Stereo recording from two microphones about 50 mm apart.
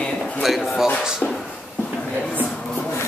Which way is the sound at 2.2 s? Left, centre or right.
Left.